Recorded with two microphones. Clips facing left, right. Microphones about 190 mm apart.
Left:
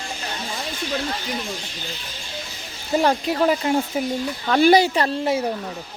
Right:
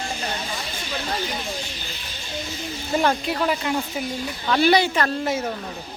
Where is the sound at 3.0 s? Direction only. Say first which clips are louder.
Left 3 dB; 30° left (ahead or behind).